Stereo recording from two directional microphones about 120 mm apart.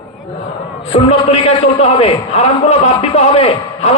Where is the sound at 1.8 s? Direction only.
60° left (ahead or behind).